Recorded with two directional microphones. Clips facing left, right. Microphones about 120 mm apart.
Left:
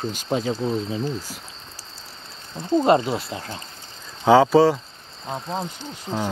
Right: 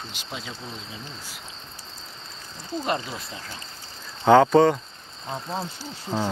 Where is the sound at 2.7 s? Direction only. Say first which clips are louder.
Left 10 dB; 25° left (ahead or behind).